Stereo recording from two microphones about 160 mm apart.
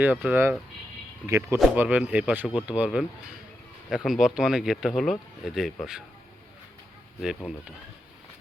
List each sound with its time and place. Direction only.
0.0 s speech: 10° right (ahead or behind)
7.2 s speech: 5° right (ahead or behind)